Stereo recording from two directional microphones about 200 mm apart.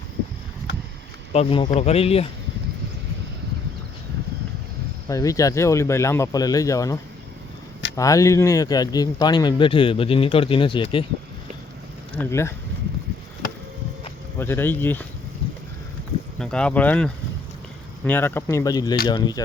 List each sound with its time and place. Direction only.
1.3 s speech: 30° left (ahead or behind)
5.0 s speech: 15° left (ahead or behind)
12.1 s speech: 10° left (ahead or behind)
14.3 s speech: 10° left (ahead or behind)
16.4 s speech: 5° left (ahead or behind); by 19.4 s 20° left (ahead or behind)